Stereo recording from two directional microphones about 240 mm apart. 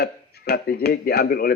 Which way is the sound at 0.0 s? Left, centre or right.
Left.